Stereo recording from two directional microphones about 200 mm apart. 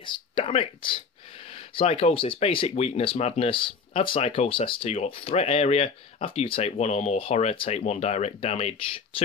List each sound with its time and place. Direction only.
0.0 s speech: 25° left (ahead or behind)